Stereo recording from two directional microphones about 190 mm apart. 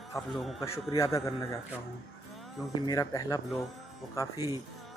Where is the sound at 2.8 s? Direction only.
20° left (ahead or behind).